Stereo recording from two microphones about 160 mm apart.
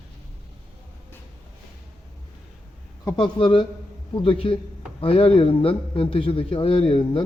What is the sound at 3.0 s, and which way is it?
A man's voice, 30° left (ahead or behind).